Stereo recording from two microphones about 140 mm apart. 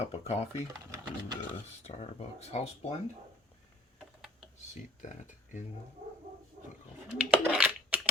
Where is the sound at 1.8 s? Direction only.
50° left (ahead or behind).